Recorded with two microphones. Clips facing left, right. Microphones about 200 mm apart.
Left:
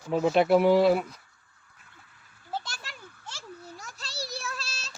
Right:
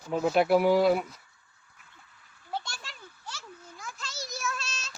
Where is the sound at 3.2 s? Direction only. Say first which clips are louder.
Left 1 dB; 30° left (ahead or behind).